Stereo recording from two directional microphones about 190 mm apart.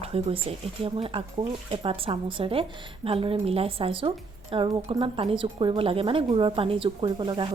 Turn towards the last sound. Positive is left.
turn(degrees=-25)  # may be behind; listen again after turning